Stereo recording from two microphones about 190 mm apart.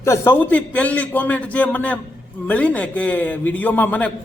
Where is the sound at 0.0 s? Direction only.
10° left (ahead or behind).